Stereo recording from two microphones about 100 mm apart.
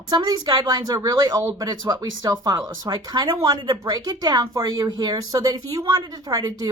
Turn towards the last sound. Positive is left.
turn(degrees=-35)  # may be behind; listen again after turning